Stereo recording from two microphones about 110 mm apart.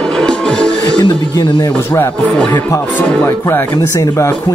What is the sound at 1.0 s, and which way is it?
Speech, 45° left (ahead or behind).